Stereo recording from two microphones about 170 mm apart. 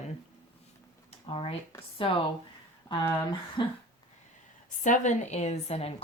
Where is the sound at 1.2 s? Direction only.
35° left (ahead or behind).